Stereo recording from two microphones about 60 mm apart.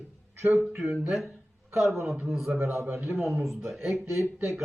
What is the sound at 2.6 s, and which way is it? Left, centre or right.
Speech, right.